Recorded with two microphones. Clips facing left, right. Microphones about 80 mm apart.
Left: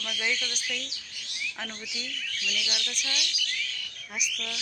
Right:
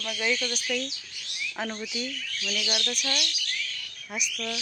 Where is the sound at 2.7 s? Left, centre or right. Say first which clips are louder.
Right 5 dB; right.